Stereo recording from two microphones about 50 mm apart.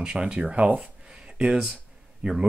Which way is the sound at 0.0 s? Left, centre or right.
Centre.